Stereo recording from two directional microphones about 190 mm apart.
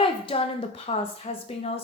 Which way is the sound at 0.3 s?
30° left (ahead or behind).